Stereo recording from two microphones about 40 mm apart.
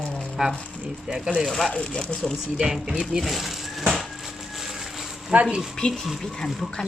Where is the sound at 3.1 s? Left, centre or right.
Centre.